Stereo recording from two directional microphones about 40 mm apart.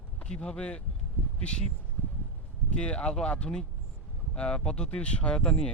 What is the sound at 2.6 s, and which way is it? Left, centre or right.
Speech, left.